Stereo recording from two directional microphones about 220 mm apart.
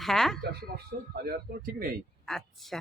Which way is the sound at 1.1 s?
45° right (ahead or behind).